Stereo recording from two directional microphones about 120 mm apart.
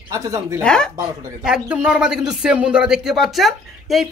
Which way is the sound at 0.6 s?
5° left (ahead or behind).